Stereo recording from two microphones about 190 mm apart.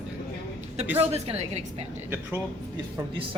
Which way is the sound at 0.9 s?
35° right (ahead or behind).